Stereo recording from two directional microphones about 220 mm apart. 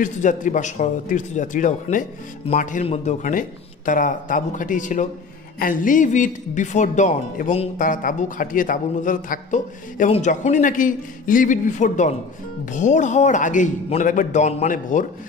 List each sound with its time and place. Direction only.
0.0 s speech: 35° left (ahead or behind)